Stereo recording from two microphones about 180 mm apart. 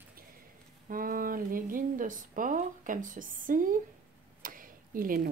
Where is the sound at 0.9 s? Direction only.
50° right (ahead or behind).